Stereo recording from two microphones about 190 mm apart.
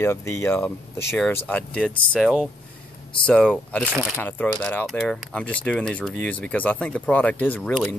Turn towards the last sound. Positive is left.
turn(degrees=5)  # may be behind; listen again after turning